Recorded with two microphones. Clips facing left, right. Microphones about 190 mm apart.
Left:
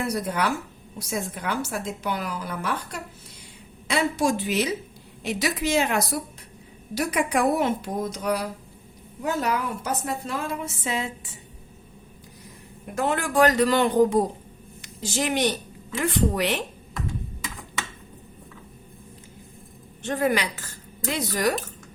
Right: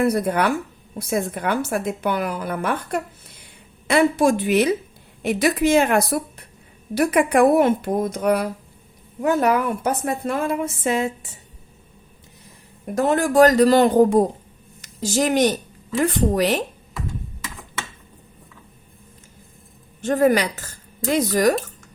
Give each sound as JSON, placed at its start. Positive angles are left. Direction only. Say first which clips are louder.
{"t": 0.0, "sound": "a woman's voice", "louder": "right 7 dB", "side_deg": -55}
{"t": 12.9, "sound": "speech", "louder": "right 6 dB", "side_deg": -40}
{"t": 20.0, "sound": "a woman's voice", "louder": "right 7 dB", "side_deg": -40}